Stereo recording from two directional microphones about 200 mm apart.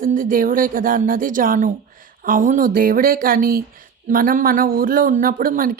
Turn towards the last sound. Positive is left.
turn(degrees=-45)  # may be behind; listen again after turning